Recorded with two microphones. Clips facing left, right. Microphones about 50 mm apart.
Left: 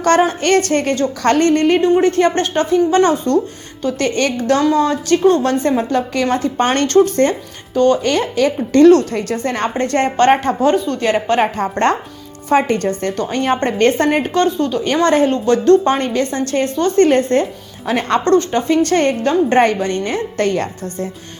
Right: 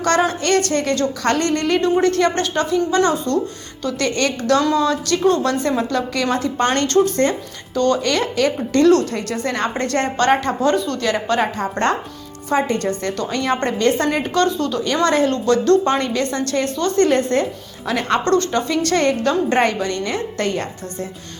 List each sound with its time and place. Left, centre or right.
0.0 s a woman's voice: left
7.7 s speech: left
8.4 s a woman's voice: left
9.7 s a woman's voice: left
10.6 s a woman's voice: left
12.8 s a woman's voice: left
14.3 s a woman's voice: centre
15.0 s a woman's voice: left
18.3 s a woman's voice: left